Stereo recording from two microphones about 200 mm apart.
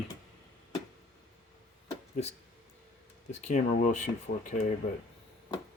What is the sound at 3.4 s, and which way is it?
Speech, 40° left (ahead or behind).